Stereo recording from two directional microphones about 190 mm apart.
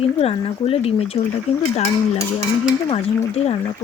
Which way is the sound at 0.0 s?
30° left (ahead or behind).